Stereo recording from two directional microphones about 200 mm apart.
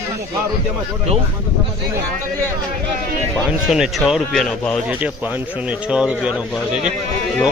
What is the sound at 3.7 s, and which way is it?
A man's voice, centre (ahead or behind).